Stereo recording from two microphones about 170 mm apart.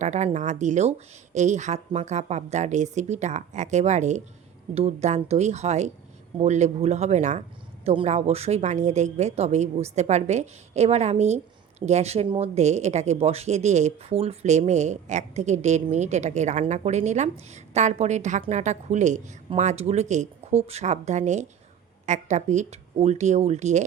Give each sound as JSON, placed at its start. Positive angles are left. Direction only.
{"t": 0.0, "sound": "speech", "side_deg": -45}